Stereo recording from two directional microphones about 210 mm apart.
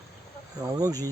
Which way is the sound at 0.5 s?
15° right (ahead or behind).